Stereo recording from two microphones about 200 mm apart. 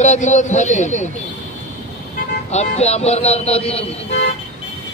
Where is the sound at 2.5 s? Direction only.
35° left (ahead or behind).